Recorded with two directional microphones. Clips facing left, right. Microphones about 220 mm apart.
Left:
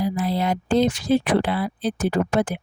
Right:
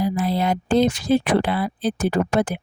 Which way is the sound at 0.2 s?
55° right (ahead or behind).